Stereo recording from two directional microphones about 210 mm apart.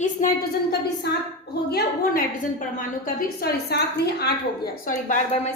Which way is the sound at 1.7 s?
45° left (ahead or behind).